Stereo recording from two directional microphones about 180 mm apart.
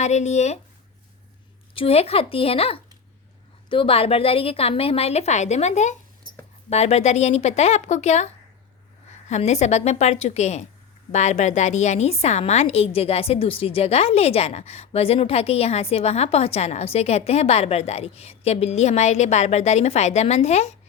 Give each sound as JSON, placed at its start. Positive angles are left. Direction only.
{"t": 0.0, "sound": "a woman's voice", "side_deg": 40}
{"t": 1.7, "sound": "a woman's voice", "side_deg": 30}
{"t": 9.3, "sound": "a woman's voice", "side_deg": 40}